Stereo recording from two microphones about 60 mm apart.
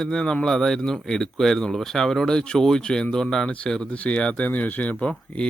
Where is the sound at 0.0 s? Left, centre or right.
Centre.